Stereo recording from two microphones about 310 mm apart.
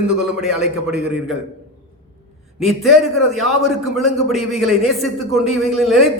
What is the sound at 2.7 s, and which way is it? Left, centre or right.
A man's voice, centre.